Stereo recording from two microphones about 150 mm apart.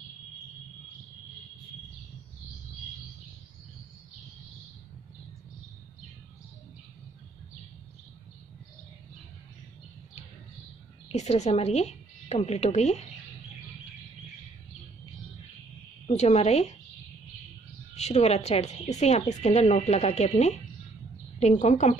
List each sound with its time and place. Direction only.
11.1 s a woman's voice: 50° left (ahead or behind)
16.1 s speech: 50° left (ahead or behind)
17.9 s speech: 45° left (ahead or behind)